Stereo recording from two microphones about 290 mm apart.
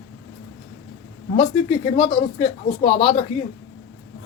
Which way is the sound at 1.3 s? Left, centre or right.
Left.